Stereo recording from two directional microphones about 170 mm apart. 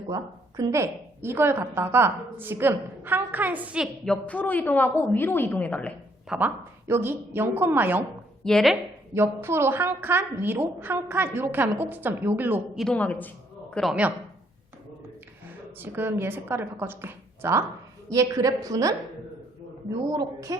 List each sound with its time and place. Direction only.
0.1 s a woman's voice: 20° right (ahead or behind)
4.0 s a woman's voice: 5° left (ahead or behind)
6.4 s a woman's voice: 15° right (ahead or behind)
8.4 s speech: centre (ahead or behind)
9.1 s a woman's voice: 15° right (ahead or behind)
12.7 s a woman's voice: 5° left (ahead or behind)
15.8 s a woman's voice: 15° right (ahead or behind)
20.1 s a woman's voice: 20° right (ahead or behind)